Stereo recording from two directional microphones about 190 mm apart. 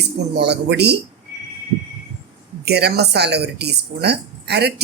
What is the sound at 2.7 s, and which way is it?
A woman's voice, 60° right (ahead or behind).